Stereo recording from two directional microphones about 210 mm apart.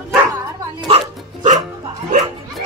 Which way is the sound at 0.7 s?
25° right (ahead or behind).